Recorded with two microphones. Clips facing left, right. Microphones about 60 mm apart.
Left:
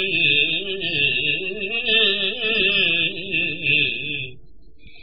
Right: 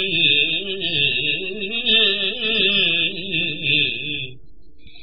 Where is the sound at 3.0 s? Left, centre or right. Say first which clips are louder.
Even; centre.